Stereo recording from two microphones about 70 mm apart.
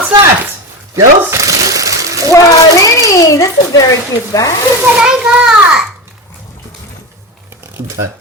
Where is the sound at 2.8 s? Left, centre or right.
Left.